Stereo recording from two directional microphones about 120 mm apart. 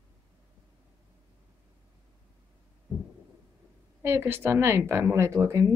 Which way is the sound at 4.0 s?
20° right (ahead or behind).